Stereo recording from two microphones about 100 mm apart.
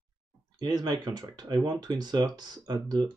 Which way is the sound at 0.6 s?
45° right (ahead or behind).